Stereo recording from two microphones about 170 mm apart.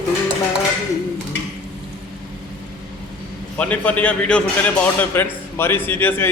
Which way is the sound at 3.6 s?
10° left (ahead or behind).